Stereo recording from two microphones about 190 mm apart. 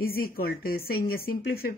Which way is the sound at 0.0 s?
50° left (ahead or behind).